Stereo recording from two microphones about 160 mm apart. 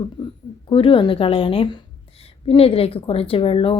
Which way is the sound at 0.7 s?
35° left (ahead or behind).